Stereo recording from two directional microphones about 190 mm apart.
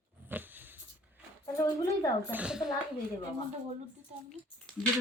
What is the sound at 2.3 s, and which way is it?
Speech, 5° right (ahead or behind).